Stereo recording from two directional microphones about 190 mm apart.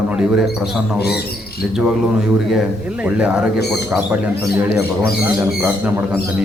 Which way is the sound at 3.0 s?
5° right (ahead or behind).